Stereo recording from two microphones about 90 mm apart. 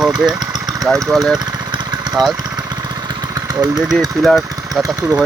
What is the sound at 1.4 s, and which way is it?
Vehicle, 55° right (ahead or behind).